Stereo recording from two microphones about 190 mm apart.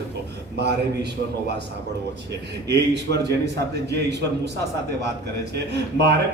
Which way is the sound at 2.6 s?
65° right (ahead or behind).